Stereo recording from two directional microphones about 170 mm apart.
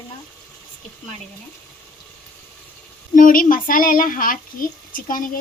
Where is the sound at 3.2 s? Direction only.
50° left (ahead or behind).